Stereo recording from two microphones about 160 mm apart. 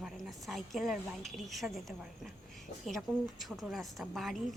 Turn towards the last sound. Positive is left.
turn(degrees=0)  # may be behind; listen again after turning